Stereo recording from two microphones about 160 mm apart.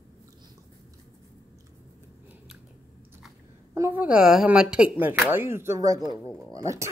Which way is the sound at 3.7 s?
15° right (ahead or behind).